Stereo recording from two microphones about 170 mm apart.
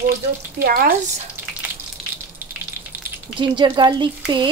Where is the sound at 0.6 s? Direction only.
65° right (ahead or behind).